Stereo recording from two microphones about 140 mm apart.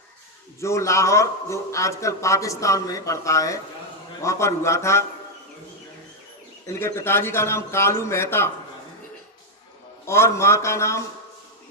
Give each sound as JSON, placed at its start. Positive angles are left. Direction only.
{"t": 0.6, "sound": "a man's voice", "side_deg": 20}
{"t": 6.7, "sound": "a man's voice", "side_deg": 15}
{"t": 10.1, "sound": "a man's voice", "side_deg": 20}